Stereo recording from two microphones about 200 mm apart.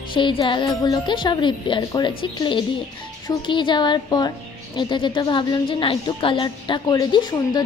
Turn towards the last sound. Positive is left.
turn(degrees=20)  # may be behind; listen again after turning